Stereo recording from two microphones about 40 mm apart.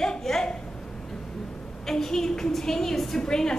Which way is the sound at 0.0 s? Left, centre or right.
Centre.